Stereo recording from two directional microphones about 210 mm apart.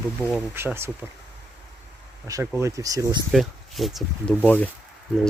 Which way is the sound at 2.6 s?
15° right (ahead or behind).